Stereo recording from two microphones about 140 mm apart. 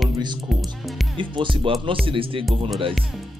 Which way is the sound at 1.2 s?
35° right (ahead or behind).